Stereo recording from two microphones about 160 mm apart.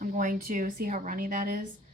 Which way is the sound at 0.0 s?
55° right (ahead or behind).